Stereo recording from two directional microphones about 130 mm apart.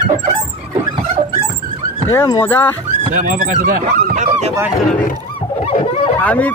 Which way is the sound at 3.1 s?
90° right.